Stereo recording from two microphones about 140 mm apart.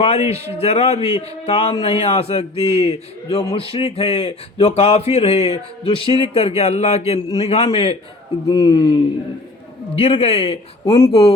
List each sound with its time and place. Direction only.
0.3 s a man's voice: 45° left (ahead or behind)
8.4 s speech: 25° left (ahead or behind)
9.9 s a man's voice: 45° left (ahead or behind)